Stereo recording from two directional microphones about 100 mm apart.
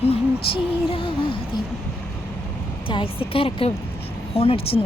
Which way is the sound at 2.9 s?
65° left (ahead or behind).